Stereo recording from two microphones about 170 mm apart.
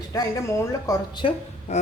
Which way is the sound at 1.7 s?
40° left (ahead or behind).